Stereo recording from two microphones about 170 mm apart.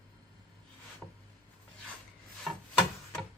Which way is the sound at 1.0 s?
5° right (ahead or behind).